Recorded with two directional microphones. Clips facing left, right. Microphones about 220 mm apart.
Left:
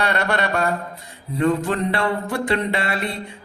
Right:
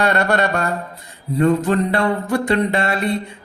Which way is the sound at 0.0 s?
45° right (ahead or behind).